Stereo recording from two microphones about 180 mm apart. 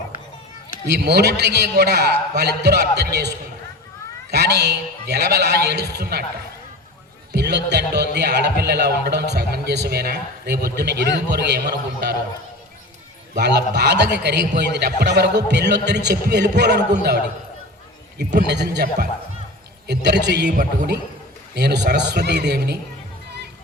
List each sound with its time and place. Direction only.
0.9 s a woman's voice: 65° right (ahead or behind)
7.3 s speech: 70° right (ahead or behind)
13.3 s speech: 70° right (ahead or behind)
18.4 s speech: 70° right (ahead or behind)
21.5 s speech: 70° right (ahead or behind)